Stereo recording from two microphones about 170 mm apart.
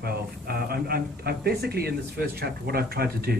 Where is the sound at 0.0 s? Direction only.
65° right (ahead or behind).